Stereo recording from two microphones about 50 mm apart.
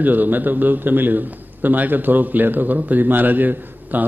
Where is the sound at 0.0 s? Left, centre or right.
Right.